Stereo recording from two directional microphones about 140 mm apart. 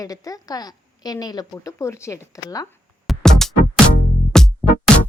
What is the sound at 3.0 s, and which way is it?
Music, centre (ahead or behind).